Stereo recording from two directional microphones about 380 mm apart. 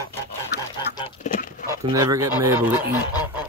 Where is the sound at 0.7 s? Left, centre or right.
Centre.